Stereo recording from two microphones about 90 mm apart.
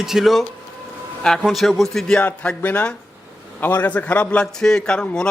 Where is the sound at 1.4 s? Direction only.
Centre (ahead or behind).